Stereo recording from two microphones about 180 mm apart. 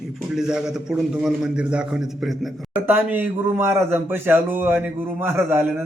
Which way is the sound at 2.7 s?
10° right (ahead or behind).